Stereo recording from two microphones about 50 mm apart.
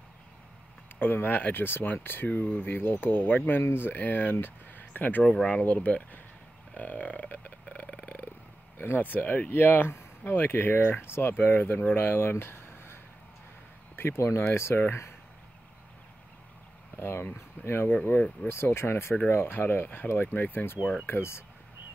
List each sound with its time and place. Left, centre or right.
0.9 s speech: left
5.2 s speech: centre
6.8 s a sound: left
8.8 s speech: left
9.8 s a sound: left
10.3 s speech: left
16.9 s speech: left
17.6 s speech: left
18.5 s speech: left
20.8 s speech: centre
21.1 s speech: left